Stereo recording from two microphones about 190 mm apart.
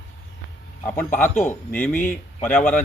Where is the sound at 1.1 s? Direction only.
10° left (ahead or behind).